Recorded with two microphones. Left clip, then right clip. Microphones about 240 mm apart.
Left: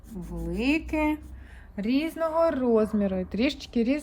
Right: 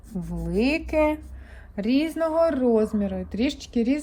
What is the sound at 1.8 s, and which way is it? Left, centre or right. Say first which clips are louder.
A woman's voice: right 3 dB; centre.